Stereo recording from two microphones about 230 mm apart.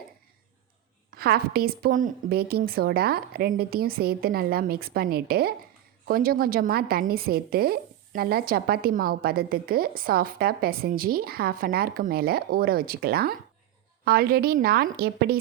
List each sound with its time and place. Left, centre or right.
1.1 s a woman's voice: right